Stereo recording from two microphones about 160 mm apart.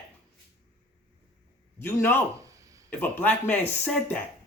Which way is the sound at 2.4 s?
20° right (ahead or behind).